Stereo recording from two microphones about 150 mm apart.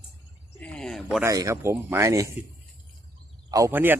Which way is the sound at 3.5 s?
15° right (ahead or behind).